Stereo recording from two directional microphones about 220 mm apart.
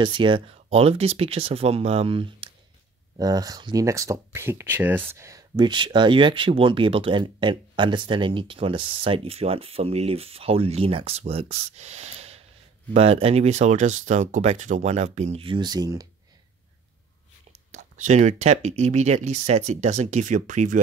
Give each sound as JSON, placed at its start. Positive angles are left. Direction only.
{"t": 0.0, "sound": "speech", "side_deg": -20}
{"t": 17.5, "sound": "speech", "side_deg": -35}